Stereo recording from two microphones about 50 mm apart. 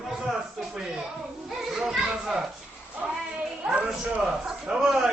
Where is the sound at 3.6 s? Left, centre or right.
Right.